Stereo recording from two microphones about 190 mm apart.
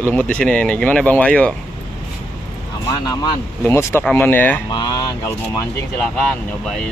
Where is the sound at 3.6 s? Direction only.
15° left (ahead or behind).